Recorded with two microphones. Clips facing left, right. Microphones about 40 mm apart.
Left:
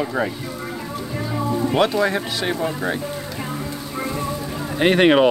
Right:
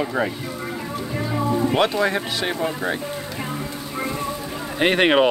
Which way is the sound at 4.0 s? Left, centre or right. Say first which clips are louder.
Even; centre.